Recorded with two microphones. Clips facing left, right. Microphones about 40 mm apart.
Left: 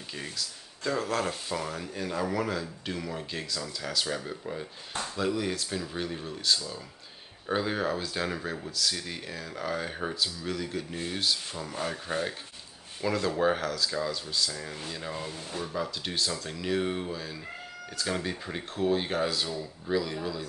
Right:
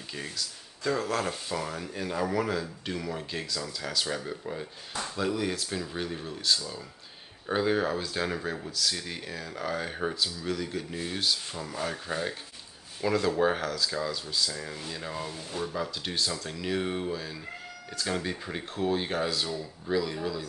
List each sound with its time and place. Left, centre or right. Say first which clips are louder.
0.1 s speech: right 1 dB; centre
13.0 s speech: right 1 dB; centre